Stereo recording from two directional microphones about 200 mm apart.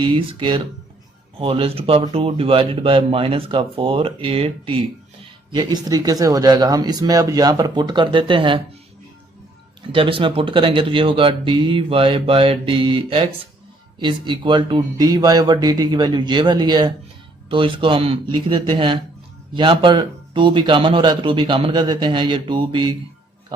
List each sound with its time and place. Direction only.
0.0 s speech: 25° right (ahead or behind)
9.9 s speech: 25° right (ahead or behind)